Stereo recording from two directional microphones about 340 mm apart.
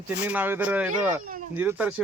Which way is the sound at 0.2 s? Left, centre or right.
Centre.